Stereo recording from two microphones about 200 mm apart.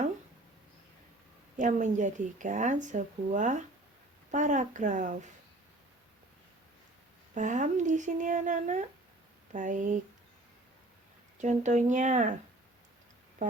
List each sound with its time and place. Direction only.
1.5 s speech: 40° right (ahead or behind)
7.3 s speech: 40° right (ahead or behind)
11.3 s speech: 35° right (ahead or behind)
13.4 s music: 40° right (ahead or behind)